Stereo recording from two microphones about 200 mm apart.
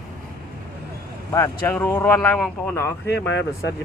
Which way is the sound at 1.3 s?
15° left (ahead or behind).